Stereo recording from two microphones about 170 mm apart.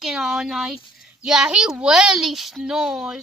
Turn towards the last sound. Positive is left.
turn(degrees=-5)  # may be behind; listen again after turning